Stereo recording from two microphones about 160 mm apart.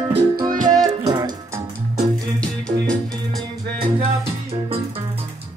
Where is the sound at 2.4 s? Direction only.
5° left (ahead or behind).